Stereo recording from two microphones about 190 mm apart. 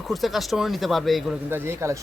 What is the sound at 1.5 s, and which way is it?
Speech, 15° right (ahead or behind).